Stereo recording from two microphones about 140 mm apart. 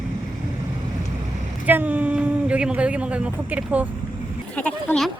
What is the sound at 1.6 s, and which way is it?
Speech, 10° right (ahead or behind).